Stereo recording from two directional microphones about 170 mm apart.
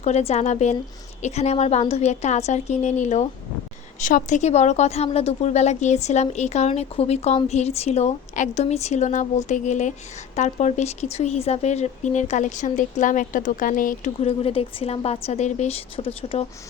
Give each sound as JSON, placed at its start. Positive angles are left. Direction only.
{"t": 0.0, "sound": "a woman's voice", "side_deg": 40}
{"t": 14.2, "sound": "a woman's voice", "side_deg": 35}